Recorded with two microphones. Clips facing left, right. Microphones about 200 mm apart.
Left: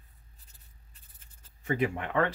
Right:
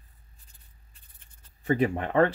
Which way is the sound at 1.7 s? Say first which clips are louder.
Right 5 dB; 35° right (ahead or behind).